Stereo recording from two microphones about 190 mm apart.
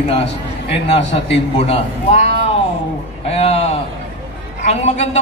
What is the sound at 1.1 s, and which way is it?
A man's voice, 30° left (ahead or behind).